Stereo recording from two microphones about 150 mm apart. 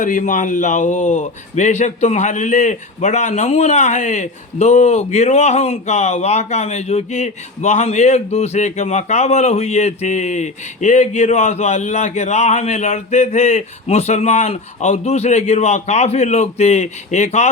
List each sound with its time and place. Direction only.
0.0 s a man's voice: 60° left (ahead or behind)